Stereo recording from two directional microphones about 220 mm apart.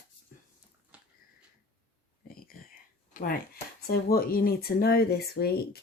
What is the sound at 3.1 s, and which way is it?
Speech, 40° left (ahead or behind).